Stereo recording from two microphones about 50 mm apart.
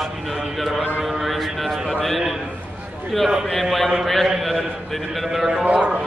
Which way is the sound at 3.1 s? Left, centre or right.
Centre.